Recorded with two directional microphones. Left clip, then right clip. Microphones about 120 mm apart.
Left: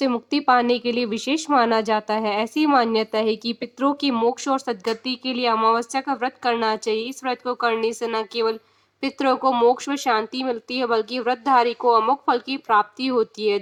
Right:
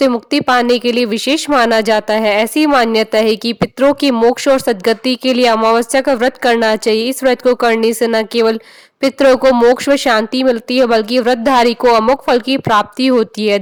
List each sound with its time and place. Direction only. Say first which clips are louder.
0.3 s a woman's voice: right 6 dB; 70° right (ahead or behind)